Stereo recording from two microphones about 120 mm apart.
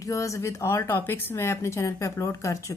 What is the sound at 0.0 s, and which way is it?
A woman's voice, 25° left (ahead or behind).